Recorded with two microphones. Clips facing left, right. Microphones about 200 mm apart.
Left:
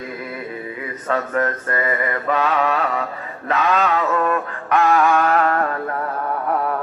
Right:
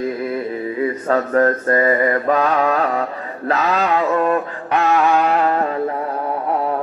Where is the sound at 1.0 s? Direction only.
30° right (ahead or behind).